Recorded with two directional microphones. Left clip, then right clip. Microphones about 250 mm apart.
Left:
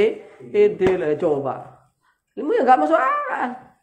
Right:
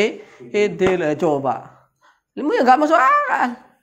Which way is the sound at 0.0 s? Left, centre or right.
Right.